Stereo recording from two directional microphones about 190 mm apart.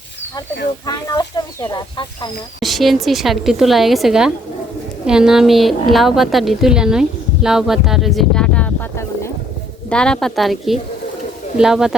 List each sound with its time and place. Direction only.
0.9 s speech: 20° left (ahead or behind)
2.6 s a woman's voice: centre (ahead or behind)
7.4 s a sound: centre (ahead or behind)
9.9 s a woman's voice: 5° left (ahead or behind)